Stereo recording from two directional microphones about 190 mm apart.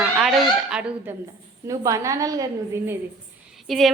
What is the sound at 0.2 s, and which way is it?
Fowl, centre (ahead or behind).